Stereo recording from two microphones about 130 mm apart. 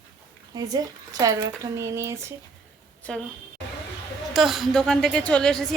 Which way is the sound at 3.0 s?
10° left (ahead or behind).